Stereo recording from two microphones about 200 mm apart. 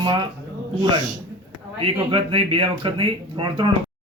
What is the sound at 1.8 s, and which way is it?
A man's voice, 25° right (ahead or behind).